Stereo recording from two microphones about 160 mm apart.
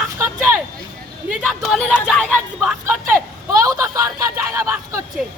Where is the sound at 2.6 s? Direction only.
15° right (ahead or behind).